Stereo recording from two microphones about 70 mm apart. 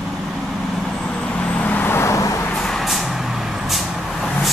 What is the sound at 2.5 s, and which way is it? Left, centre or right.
Vehicle, centre.